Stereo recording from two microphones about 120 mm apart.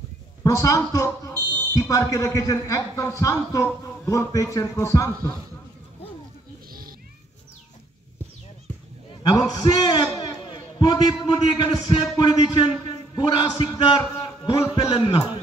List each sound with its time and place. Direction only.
0.4 s a man's voice: 30° left (ahead or behind)
9.2 s a man's voice: 35° left (ahead or behind)